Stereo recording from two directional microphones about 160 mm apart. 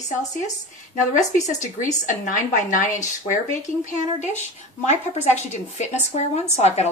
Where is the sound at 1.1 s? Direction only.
50° left (ahead or behind).